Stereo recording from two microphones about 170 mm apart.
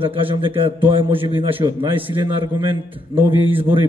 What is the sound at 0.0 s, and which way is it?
A man's voice, 30° right (ahead or behind).